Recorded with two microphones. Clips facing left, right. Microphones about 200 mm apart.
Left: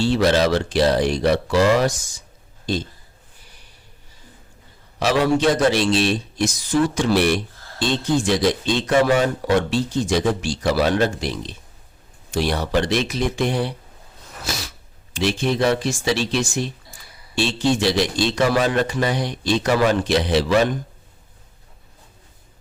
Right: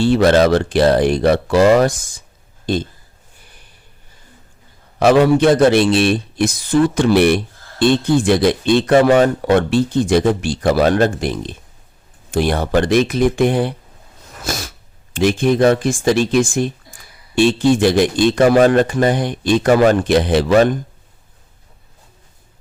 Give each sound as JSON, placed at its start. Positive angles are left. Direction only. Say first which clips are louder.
{"t": 0.0, "sound": "a man's voice", "louder": "right 5 dB", "side_deg": -55}
{"t": 4.9, "sound": "a man's voice", "louder": "right 7 dB", "side_deg": -55}
{"t": 14.4, "sound": "sneeze", "louder": "right 5 dB", "side_deg": -50}
{"t": 15.1, "sound": "speech", "louder": "right 6 dB", "side_deg": -50}